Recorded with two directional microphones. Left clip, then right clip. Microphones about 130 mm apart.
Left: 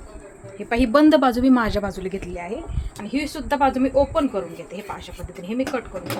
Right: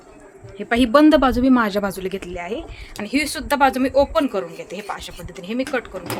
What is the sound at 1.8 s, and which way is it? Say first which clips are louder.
Speech: right 3 dB; 30° right (ahead or behind).